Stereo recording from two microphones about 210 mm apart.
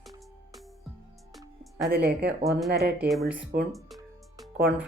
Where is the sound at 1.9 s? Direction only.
50° right (ahead or behind).